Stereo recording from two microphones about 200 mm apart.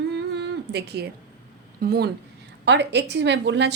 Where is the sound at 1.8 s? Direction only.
50° right (ahead or behind).